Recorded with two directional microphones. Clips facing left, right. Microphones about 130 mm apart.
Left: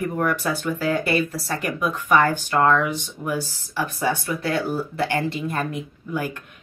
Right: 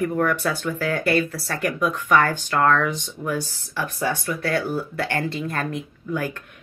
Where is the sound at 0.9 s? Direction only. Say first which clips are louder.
Right 3 dB; 20° left (ahead or behind).